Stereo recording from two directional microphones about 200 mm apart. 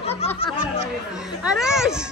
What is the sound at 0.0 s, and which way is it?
Music, 30° left (ahead or behind).